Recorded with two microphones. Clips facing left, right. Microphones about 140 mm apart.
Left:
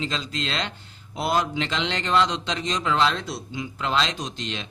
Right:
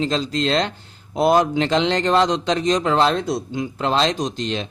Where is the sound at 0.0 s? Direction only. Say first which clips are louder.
Right 9 dB; 40° right (ahead or behind).